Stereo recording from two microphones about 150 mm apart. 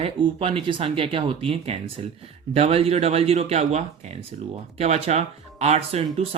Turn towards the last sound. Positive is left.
turn(degrees=-45)  # may be behind; listen again after turning